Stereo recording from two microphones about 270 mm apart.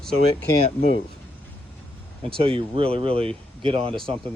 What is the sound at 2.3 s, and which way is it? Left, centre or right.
Speech, centre.